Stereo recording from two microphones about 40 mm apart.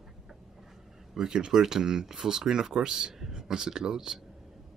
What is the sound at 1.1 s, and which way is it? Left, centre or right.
Speech, centre.